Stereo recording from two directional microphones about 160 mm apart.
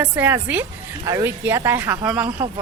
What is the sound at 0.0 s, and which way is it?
A woman's voice, 10° right (ahead or behind).